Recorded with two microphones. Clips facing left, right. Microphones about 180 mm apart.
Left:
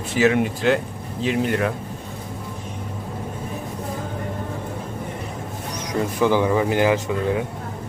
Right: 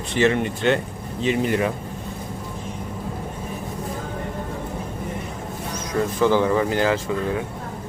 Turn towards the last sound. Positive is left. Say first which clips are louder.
# left 2 dB
turn(degrees=15)  # may be behind; listen again after turning